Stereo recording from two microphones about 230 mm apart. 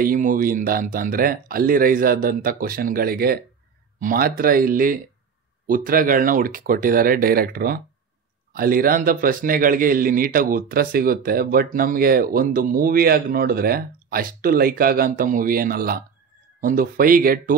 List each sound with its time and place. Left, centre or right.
0.0 s speech: right